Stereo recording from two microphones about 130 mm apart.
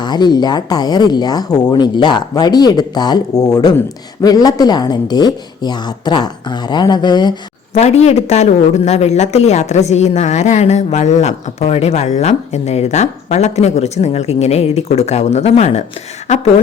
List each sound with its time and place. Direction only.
0.0 s speech: 35° left (ahead or behind)
7.7 s speech: 55° left (ahead or behind)